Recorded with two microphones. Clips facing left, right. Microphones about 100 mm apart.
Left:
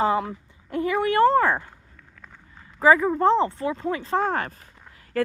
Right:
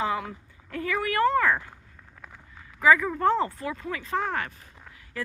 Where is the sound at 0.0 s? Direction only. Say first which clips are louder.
Left 6 dB; 30° left (ahead or behind).